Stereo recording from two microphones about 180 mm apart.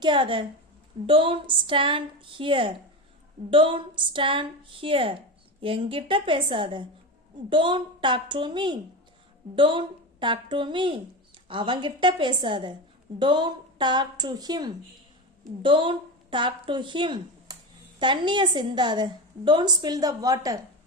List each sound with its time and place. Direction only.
0.0 s a woman's voice: 25° right (ahead or behind)